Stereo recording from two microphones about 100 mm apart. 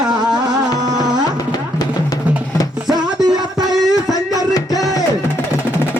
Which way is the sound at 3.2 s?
40° right (ahead or behind).